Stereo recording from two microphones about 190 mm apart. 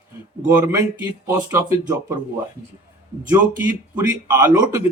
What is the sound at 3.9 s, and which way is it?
Speech, 20° right (ahead or behind).